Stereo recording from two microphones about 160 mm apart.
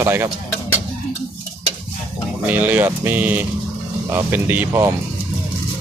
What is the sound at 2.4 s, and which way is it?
Speech, 10° right (ahead or behind).